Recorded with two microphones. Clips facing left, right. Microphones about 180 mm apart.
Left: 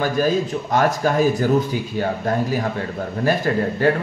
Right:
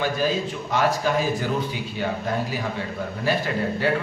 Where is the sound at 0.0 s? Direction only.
45° left (ahead or behind).